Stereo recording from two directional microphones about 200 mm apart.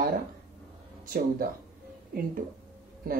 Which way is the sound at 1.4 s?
45° right (ahead or behind).